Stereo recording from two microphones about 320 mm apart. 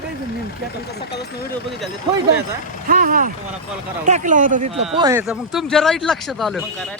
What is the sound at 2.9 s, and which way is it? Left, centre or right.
Speech, right.